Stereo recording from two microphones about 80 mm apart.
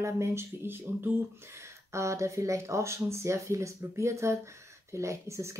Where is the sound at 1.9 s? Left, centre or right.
Right.